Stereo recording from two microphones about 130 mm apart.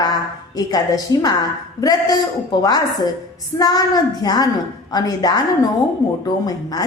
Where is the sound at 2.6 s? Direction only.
30° left (ahead or behind).